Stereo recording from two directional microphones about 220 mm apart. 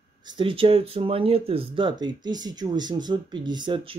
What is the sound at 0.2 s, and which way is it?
Speech, 20° right (ahead or behind).